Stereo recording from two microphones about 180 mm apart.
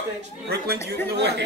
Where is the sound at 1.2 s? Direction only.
70° right (ahead or behind).